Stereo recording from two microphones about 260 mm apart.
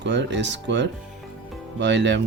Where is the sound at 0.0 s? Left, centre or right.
Right.